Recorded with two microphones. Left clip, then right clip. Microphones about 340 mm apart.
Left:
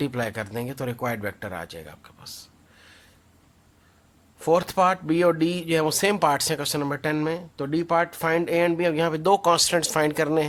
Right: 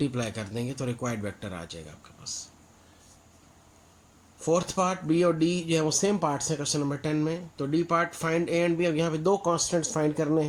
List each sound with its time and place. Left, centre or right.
0.0 s speech: left
4.4 s speech: left